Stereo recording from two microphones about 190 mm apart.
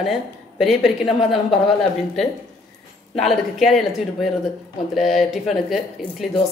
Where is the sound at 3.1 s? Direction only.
Centre (ahead or behind).